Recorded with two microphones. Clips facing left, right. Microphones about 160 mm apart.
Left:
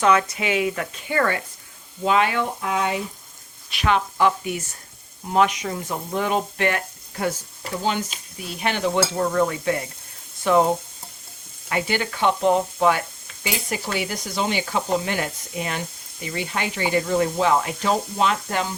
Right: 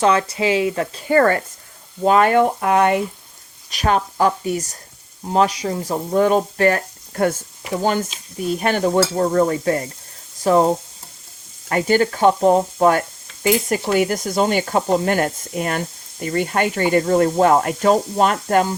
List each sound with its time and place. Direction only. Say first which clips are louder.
0.0 s speech: right 3 dB; 30° right (ahead or behind); by 3.0 s 60° right (ahead or behind)
3.7 s speech: right 3 dB; 40° right (ahead or behind)
11.7 s speech: right 8 dB; 45° right (ahead or behind)